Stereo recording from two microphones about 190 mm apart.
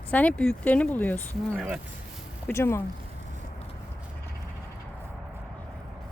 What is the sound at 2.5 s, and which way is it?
Speech, 15° left (ahead or behind).